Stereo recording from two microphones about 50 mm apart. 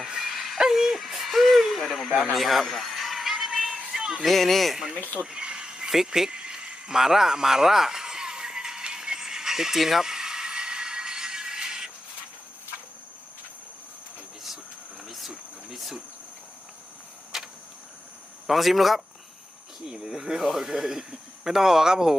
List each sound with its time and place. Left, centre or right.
0.0 s dog: centre
0.6 s a sound: centre
2.3 s music: centre
4.3 s speech: centre
5.2 s a sound: centre
15.0 s insect: centre
15.7 s cricket: centre
18.4 s speech: centre